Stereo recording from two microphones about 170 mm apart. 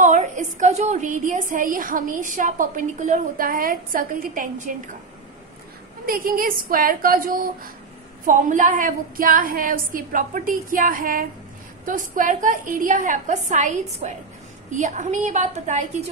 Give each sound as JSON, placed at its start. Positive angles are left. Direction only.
{"t": 0.0, "sound": "a woman's voice", "side_deg": -45}
{"t": 6.0, "sound": "a woman's voice", "side_deg": -55}